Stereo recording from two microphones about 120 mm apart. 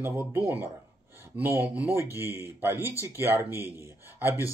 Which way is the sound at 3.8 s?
20° right (ahead or behind).